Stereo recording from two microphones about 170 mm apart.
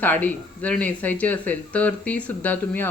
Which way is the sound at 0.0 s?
10° left (ahead or behind).